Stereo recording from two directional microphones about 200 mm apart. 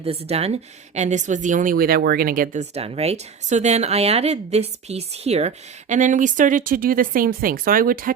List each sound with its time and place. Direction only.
0.0 s speech: 30° right (ahead or behind)